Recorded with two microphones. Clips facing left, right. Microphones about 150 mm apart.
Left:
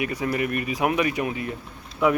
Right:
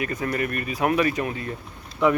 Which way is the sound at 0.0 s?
10° left (ahead or behind).